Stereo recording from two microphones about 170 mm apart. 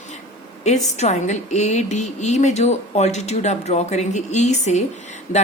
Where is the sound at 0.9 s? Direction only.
40° left (ahead or behind).